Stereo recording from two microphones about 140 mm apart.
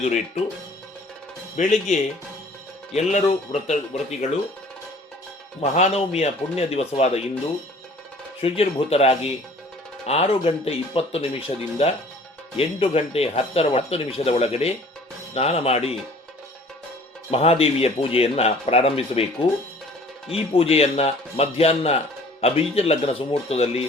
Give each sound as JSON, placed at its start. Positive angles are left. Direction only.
{"t": 0.0, "sound": "speech", "side_deg": 50}
{"t": 1.5, "sound": "speech", "side_deg": 55}
{"t": 5.5, "sound": "speech", "side_deg": 50}
{"t": 8.4, "sound": "speech", "side_deg": 45}
{"t": 17.3, "sound": "speech", "side_deg": 45}
{"t": 20.3, "sound": "speech", "side_deg": 45}